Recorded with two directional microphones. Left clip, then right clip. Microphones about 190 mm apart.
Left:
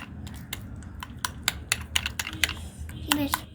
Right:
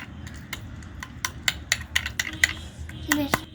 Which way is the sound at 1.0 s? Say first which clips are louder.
Right 3 dB; centre (ahead or behind).